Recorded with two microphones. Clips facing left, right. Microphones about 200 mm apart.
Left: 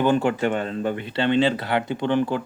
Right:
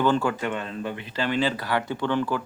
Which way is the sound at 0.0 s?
20° left (ahead or behind).